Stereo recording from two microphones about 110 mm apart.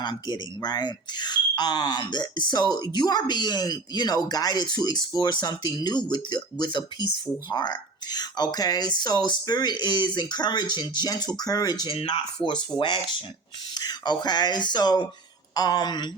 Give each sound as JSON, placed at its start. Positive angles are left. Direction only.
{"t": 0.0, "sound": "speech", "side_deg": 40}
{"t": 11.9, "sound": "speech", "side_deg": 55}
{"t": 13.7, "sound": "speech", "side_deg": 40}